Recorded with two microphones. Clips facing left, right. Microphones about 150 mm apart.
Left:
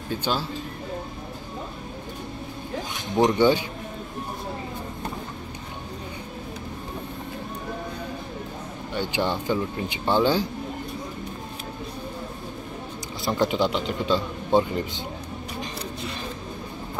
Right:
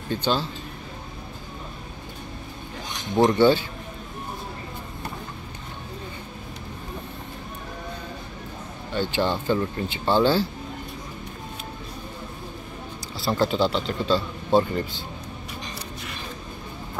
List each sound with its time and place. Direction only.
0.1 s a man's voice: 10° left (ahead or behind)
3.3 s a man's voice: 15° left (ahead or behind)
8.9 s a man's voice: 15° left (ahead or behind)
13.2 s a man's voice: 15° left (ahead or behind)